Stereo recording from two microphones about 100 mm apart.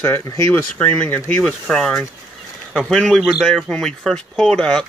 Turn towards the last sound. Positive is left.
turn(degrees=5)  # may be behind; listen again after turning